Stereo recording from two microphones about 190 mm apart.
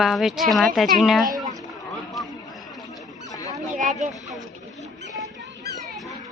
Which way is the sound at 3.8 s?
40° right (ahead or behind).